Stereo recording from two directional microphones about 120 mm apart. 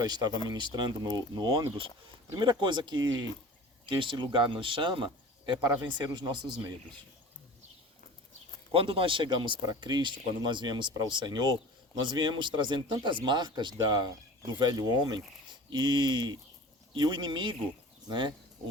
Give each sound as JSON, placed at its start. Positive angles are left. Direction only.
{"t": 0.0, "sound": "speech", "side_deg": -35}
{"t": 8.7, "sound": "speech", "side_deg": -45}